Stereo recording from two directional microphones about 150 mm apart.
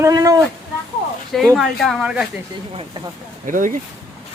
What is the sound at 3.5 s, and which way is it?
Speech, 60° right (ahead or behind).